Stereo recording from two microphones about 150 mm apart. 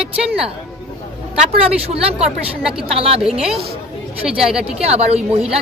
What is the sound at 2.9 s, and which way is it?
Speech, 40° right (ahead or behind).